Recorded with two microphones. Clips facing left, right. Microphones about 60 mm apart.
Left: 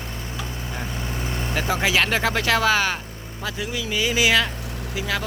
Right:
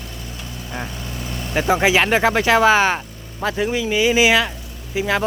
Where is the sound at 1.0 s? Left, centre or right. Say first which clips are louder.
Left 1 dB; left.